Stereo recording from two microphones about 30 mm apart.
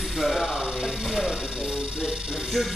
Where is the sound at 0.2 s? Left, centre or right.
Centre.